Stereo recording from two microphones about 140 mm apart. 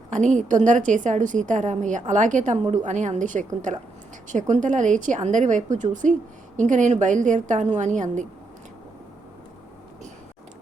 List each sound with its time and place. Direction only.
0.3 s a woman's voice: 60° right (ahead or behind)